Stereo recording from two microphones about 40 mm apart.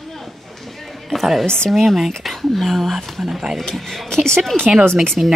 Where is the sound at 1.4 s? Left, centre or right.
Centre.